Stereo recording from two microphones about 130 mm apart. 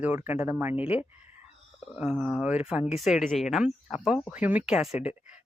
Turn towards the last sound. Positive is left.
turn(degrees=-5)  # may be behind; listen again after turning